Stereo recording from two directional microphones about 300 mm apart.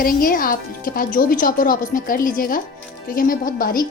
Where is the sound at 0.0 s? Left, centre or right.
Left.